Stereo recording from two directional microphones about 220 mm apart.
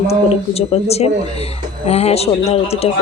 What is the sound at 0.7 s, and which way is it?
Speech, 30° left (ahead or behind).